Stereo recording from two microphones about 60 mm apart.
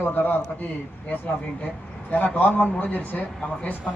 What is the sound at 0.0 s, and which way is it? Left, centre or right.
Speech, left.